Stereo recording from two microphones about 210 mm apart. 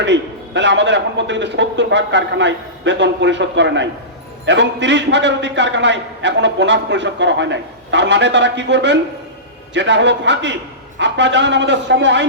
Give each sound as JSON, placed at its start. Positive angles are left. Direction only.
{"t": 0.0, "sound": "a man's voice", "side_deg": -55}